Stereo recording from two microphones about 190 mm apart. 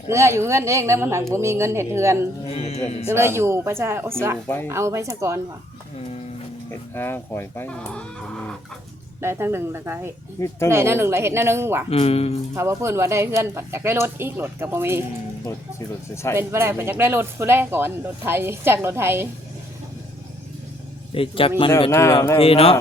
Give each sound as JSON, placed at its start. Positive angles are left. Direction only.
{"t": 0.1, "sound": "speech", "side_deg": -15}
{"t": 2.5, "sound": "speech", "side_deg": 35}
{"t": 3.1, "sound": "speech", "side_deg": -15}
{"t": 4.4, "sound": "speech", "side_deg": 10}
{"t": 4.7, "sound": "speech", "side_deg": -15}
{"t": 6.7, "sound": "speech", "side_deg": 10}
{"t": 9.2, "sound": "speech", "side_deg": -15}
{"t": 11.9, "sound": "speech", "side_deg": 30}
{"t": 12.5, "sound": "speech", "side_deg": -15}
{"t": 16.3, "sound": "speech", "side_deg": -15}
{"t": 21.1, "sound": "a man's voice", "side_deg": 30}
{"t": 21.8, "sound": "speech", "side_deg": 15}
{"t": 22.4, "sound": "speech", "side_deg": 30}